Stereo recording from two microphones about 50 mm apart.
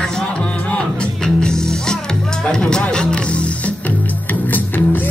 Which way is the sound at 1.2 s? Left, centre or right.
Centre.